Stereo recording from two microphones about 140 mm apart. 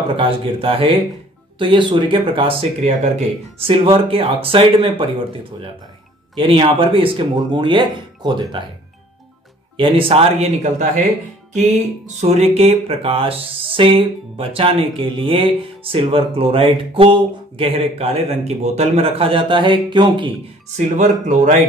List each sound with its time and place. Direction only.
0.1 s speech: 40° right (ahead or behind)
3.5 s speech: 40° right (ahead or behind)
9.8 s speech: 40° right (ahead or behind)
12.2 s speech: 50° right (ahead or behind)
20.7 s speech: 60° right (ahead or behind)